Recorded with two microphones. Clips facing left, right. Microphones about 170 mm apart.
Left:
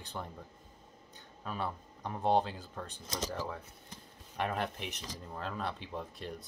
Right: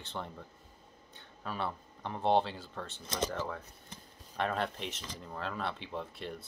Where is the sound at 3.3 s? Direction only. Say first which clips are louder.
Right 1 dB; 10° left (ahead or behind).